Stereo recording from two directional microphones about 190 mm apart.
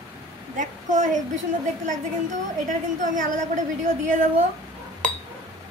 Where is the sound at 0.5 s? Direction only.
40° right (ahead or behind).